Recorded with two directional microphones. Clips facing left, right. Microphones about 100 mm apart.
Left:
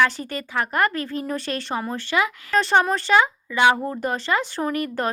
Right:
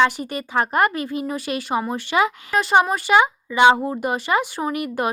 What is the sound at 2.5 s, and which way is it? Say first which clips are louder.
Speech: even; 10° right (ahead or behind).